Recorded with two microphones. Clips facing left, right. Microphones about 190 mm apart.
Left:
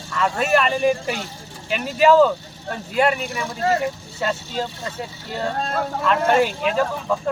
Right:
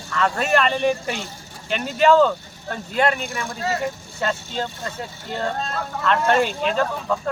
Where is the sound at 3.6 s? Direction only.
50° left (ahead or behind).